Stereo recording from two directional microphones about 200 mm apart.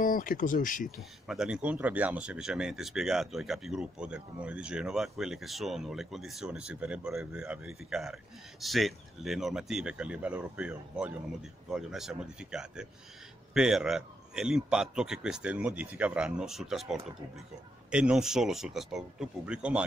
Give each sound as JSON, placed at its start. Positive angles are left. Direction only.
{"t": 0.0, "sound": "speech", "side_deg": 45}
{"t": 0.8, "sound": "speech", "side_deg": 0}